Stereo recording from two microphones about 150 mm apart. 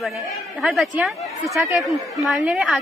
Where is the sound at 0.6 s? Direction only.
Centre (ahead or behind).